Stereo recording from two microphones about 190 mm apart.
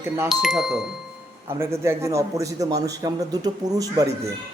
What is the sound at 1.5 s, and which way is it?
A man's voice, 15° right (ahead or behind).